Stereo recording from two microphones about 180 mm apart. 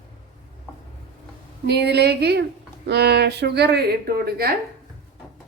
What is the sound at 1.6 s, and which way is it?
A woman's voice, 65° right (ahead or behind).